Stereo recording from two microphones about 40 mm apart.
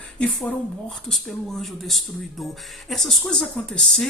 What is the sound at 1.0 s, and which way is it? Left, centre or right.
Speech, centre.